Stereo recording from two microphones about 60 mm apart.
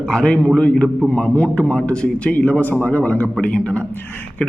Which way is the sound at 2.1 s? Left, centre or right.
Left.